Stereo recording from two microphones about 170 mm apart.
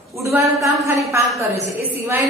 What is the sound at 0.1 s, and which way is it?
A man's voice, 15° right (ahead or behind).